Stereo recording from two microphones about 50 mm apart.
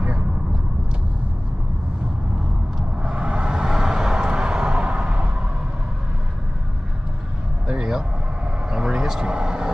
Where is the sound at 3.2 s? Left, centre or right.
Centre.